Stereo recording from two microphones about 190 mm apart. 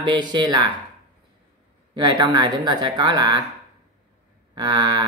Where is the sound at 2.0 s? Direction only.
20° right (ahead or behind).